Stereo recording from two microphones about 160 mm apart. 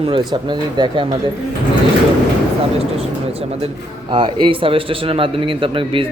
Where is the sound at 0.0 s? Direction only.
30° right (ahead or behind).